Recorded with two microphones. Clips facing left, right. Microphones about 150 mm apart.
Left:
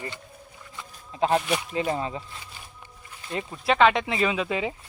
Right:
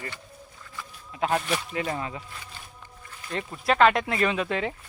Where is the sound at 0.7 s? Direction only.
25° left (ahead or behind).